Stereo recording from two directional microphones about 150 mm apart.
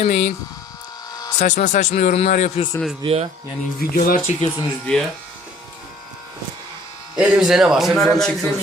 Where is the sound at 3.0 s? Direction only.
45° right (ahead or behind).